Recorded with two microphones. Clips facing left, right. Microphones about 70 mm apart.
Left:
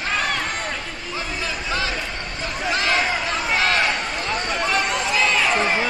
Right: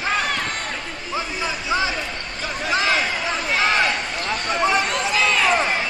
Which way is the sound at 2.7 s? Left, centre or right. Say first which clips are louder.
Even; centre.